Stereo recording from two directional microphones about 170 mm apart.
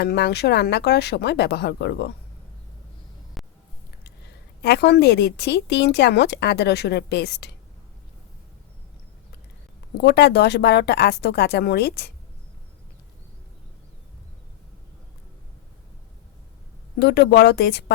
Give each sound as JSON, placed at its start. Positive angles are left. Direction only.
{"t": 0.0, "sound": "a woman's voice", "side_deg": 75}
{"t": 3.4, "sound": "a sound", "side_deg": 0}
{"t": 4.6, "sound": "a woman's voice", "side_deg": 75}
{"t": 10.0, "sound": "a woman's voice", "side_deg": 75}
{"t": 17.0, "sound": "a woman's voice", "side_deg": 80}